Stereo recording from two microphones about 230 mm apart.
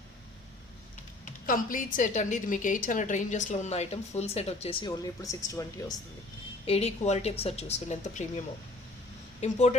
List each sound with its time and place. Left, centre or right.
1.2 s speech: left; by 5.8 s centre
6.7 s speech: left
9.4 s speech: left